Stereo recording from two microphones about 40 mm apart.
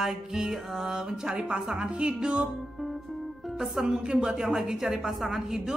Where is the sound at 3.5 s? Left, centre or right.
Centre.